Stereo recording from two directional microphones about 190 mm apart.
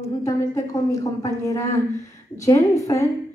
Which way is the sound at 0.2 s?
15° left (ahead or behind).